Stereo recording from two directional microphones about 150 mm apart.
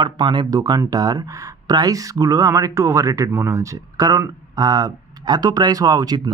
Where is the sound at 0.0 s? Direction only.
30° right (ahead or behind).